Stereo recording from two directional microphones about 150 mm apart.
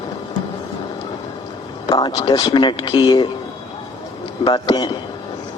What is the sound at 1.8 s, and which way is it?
Speech, 25° left (ahead or behind).